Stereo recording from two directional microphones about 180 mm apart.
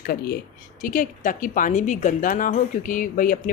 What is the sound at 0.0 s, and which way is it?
Speech, 55° left (ahead or behind).